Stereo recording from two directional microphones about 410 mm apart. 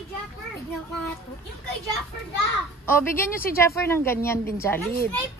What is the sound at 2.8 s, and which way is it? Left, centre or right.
A woman's voice, centre.